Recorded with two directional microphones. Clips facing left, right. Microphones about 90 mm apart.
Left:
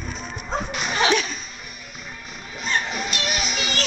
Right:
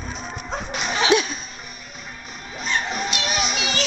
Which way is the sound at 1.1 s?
20° right (ahead or behind).